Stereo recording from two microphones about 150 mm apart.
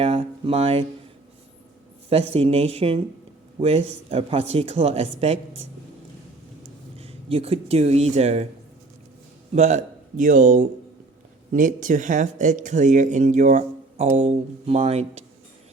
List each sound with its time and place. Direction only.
0.0 s a sound: 40° right (ahead or behind)
2.0 s speech: 40° right (ahead or behind)
7.0 s speech: 40° right (ahead or behind)
9.5 s a man's voice: 50° right (ahead or behind)